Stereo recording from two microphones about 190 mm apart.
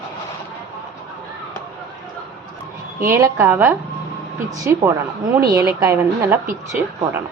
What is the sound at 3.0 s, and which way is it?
A woman's voice, 15° right (ahead or behind).